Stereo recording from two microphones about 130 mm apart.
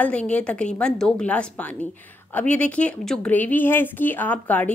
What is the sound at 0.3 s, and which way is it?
Speech, 10° left (ahead or behind).